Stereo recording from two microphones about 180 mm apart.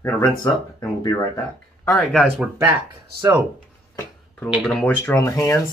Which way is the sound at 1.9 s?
5° left (ahead or behind).